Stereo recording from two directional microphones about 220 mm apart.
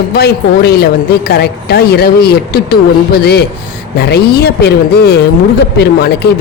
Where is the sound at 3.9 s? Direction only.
45° left (ahead or behind).